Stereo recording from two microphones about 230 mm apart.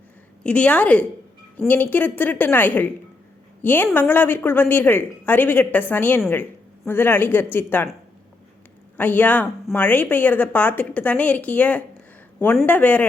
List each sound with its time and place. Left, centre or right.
0.4 s a woman's voice: centre
9.0 s a woman's voice: centre